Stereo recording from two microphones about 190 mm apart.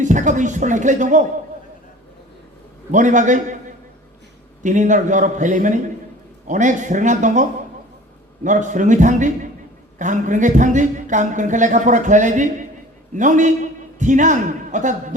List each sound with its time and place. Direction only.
0.0 s a woman's voice: 40° right (ahead or behind)
2.9 s a woman's voice: 40° right (ahead or behind)
4.6 s a woman's voice: 40° right (ahead or behind)
8.4 s a woman's voice: 40° right (ahead or behind)